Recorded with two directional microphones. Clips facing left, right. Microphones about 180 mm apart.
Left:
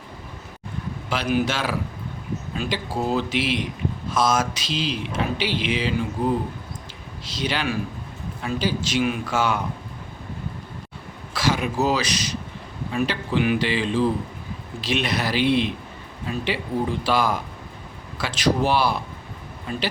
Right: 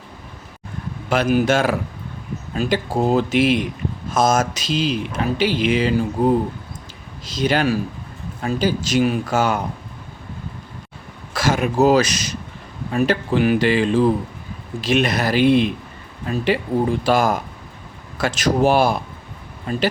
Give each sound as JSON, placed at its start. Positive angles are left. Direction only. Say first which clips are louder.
{"t": 1.1, "sound": "speech", "louder": "right 6 dB", "side_deg": -50}
{"t": 11.3, "sound": "speech", "louder": "right 5 dB", "side_deg": -50}